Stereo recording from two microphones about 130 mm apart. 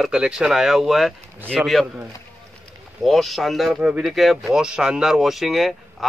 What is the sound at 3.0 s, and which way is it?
Speech, centre (ahead or behind).